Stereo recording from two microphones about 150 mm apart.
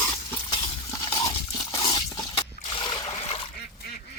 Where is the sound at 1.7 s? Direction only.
30° left (ahead or behind).